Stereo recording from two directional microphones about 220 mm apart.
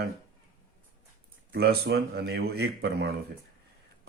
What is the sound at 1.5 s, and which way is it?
Speech, 45° right (ahead or behind).